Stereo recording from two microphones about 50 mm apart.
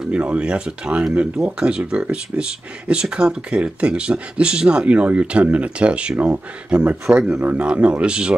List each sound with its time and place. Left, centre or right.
0.1 s speech: right